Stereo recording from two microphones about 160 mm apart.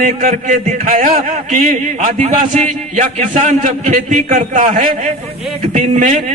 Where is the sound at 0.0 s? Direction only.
55° right (ahead or behind).